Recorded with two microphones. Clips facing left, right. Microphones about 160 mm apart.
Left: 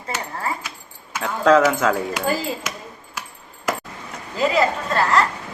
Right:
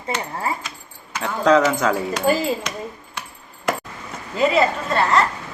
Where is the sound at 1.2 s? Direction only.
5° left (ahead or behind).